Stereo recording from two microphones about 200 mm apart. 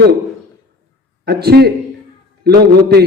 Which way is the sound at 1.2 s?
50° right (ahead or behind).